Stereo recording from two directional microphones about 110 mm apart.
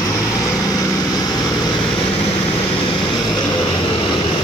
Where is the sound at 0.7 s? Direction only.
30° left (ahead or behind).